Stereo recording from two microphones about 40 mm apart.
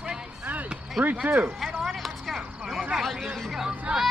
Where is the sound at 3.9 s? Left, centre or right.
Right.